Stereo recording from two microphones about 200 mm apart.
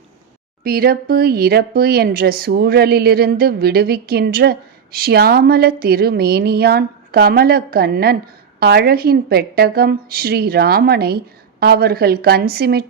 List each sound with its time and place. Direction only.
0.6 s speech: 50° right (ahead or behind)